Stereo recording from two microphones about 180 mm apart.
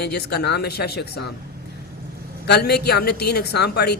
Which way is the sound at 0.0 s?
65° left (ahead or behind).